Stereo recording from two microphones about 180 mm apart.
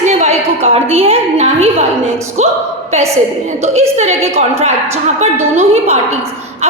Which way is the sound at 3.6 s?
35° right (ahead or behind).